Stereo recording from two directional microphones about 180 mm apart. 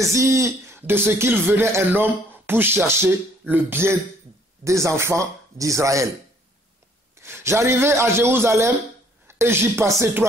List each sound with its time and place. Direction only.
0.0 s speech: 15° right (ahead or behind)
7.2 s a man's voice: 15° right (ahead or behind)